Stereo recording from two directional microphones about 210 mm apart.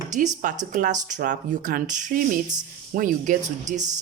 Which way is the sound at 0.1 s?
35° right (ahead or behind).